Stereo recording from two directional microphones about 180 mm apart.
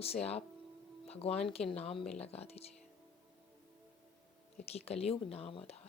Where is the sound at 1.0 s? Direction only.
35° left (ahead or behind).